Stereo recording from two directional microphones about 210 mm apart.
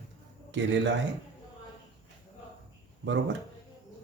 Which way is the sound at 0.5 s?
60° right (ahead or behind).